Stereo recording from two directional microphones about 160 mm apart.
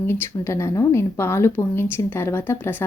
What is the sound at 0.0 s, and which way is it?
A woman's voice, 15° left (ahead or behind).